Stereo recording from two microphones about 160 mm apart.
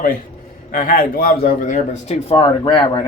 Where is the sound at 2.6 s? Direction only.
25° left (ahead or behind).